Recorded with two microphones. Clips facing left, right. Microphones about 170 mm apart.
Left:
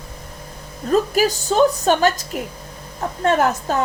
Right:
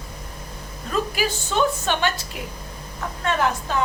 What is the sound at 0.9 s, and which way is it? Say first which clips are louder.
A woman's voice: left 7 dB; 40° left (ahead or behind).